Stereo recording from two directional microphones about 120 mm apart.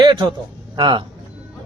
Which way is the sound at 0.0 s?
40° right (ahead or behind).